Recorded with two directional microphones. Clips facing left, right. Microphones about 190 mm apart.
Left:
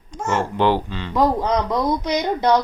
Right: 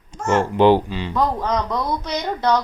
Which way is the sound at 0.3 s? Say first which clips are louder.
Right 5 dB; 15° right (ahead or behind).